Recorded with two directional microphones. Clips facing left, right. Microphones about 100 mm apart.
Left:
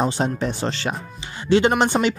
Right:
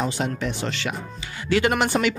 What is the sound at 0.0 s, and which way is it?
Speech, 35° left (ahead or behind).